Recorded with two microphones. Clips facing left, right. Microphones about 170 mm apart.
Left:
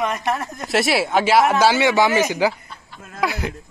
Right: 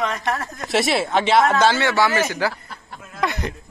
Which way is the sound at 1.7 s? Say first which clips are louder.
Left 3 dB; 15° left (ahead or behind).